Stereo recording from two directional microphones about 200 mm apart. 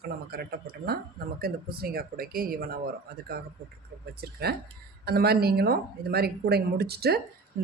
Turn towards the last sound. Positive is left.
turn(degrees=-55)  # may be behind; listen again after turning